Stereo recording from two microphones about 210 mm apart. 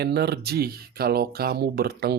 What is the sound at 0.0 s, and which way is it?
Speech, 50° right (ahead or behind).